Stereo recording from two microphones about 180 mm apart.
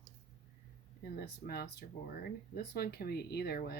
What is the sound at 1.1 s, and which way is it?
Speech, 60° left (ahead or behind).